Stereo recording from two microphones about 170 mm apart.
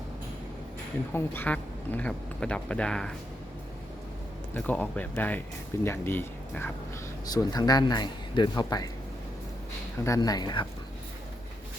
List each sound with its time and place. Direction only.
1.1 s speech: 10° left (ahead or behind)
4.5 s speech: 10° left (ahead or behind)
7.3 s speech: 25° left (ahead or behind)
10.0 s speech: 20° left (ahead or behind)